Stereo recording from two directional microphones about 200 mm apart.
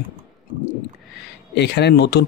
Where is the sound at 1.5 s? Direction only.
55° left (ahead or behind).